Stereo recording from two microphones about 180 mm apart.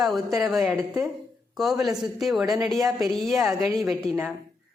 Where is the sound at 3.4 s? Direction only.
15° right (ahead or behind).